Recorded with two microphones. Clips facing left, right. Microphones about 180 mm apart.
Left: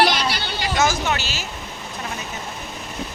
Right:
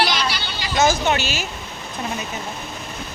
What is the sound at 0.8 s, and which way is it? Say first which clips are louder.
Speech: right 4 dB; 20° right (ahead or behind).